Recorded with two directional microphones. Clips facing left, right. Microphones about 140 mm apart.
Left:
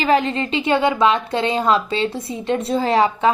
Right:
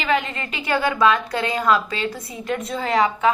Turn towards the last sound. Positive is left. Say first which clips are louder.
# left 3 dB
turn(degrees=30)  # may be behind; listen again after turning